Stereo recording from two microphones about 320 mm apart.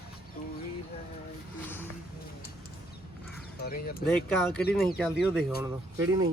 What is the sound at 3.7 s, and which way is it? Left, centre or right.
Speech, left.